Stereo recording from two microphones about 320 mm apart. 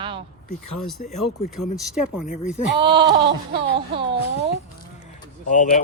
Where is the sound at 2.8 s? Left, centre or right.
Centre.